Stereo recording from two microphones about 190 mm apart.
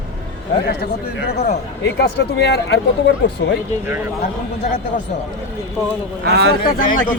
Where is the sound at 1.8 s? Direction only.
60° left (ahead or behind).